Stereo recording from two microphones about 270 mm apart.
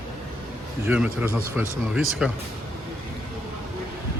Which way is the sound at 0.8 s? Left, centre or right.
Centre.